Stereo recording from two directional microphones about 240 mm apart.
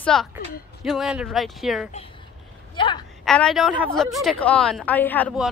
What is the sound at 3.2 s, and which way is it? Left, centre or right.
A woman's voice, centre.